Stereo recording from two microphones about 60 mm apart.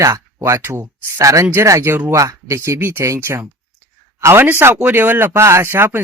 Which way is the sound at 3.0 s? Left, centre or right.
Right.